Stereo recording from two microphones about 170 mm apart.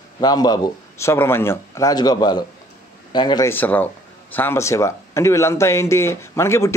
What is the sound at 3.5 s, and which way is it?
A man's voice, 10° left (ahead or behind).